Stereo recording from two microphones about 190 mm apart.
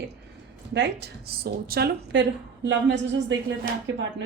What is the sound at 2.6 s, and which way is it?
Speech, 70° right (ahead or behind).